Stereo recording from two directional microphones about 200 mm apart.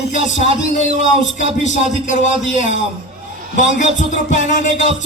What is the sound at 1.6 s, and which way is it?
A man's voice, 40° left (ahead or behind).